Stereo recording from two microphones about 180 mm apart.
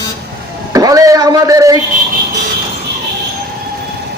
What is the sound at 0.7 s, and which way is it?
A man's voice, 20° right (ahead or behind).